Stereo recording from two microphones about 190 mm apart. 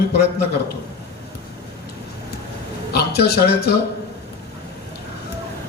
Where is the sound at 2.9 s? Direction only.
60° left (ahead or behind).